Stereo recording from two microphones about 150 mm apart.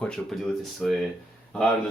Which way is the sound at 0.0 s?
5° left (ahead or behind).